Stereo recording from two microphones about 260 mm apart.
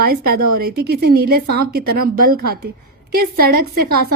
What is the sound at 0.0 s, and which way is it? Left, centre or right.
Speech, right.